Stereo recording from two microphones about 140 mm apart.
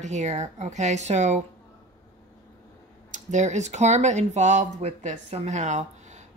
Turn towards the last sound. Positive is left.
turn(degrees=-55)  # may be behind; listen again after turning